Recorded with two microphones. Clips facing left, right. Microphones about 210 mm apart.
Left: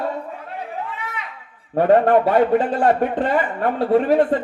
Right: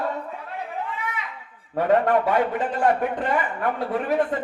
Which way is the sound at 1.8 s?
30° left (ahead or behind).